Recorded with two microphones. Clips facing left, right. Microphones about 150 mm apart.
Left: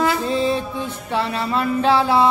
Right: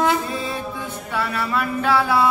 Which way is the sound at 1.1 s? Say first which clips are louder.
Left 2 dB; 25° left (ahead or behind).